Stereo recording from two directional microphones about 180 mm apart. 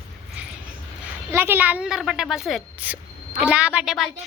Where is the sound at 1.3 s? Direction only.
10° right (ahead or behind).